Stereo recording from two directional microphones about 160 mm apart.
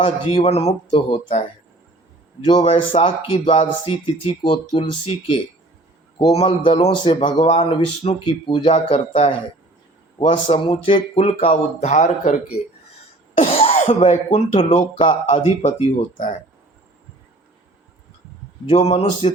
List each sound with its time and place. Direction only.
0.0 s speech: 35° left (ahead or behind)
13.4 s speech: 40° left (ahead or behind)
15.0 s speech: 35° left (ahead or behind)
16.0 s speech: 55° left (ahead or behind)
18.7 s speech: 40° left (ahead or behind)